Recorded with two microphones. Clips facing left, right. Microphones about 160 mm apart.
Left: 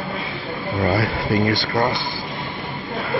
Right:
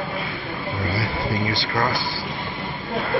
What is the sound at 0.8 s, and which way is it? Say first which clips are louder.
Speech: left 7 dB; 55° left (ahead or behind).